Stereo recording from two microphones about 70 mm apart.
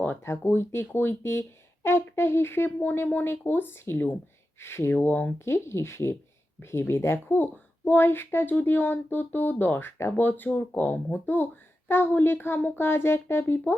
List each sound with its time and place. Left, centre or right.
0.0 s speech: left
5.0 s speech: left
5.5 s speech: left